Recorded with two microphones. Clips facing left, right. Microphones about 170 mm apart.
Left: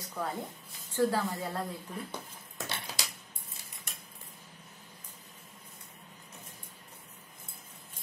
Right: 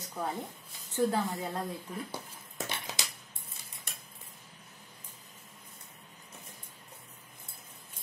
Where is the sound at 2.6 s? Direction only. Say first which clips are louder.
Right 1 dB; 20° right (ahead or behind).